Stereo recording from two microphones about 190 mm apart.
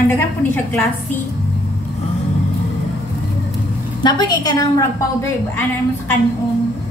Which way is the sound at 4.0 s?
25° left (ahead or behind).